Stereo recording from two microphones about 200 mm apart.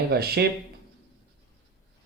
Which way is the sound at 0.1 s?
55° right (ahead or behind).